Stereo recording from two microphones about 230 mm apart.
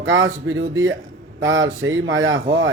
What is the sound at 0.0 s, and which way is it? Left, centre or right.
Speech, right.